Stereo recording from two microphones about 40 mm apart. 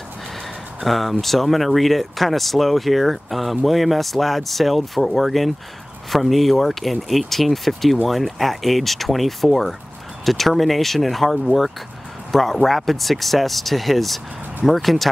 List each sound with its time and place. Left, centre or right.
0.8 s speech: centre